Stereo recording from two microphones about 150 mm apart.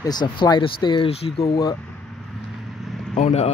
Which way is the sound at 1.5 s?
25° left (ahead or behind).